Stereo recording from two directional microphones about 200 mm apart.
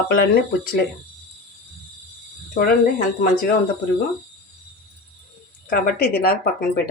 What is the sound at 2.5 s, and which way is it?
Speech, 45° left (ahead or behind).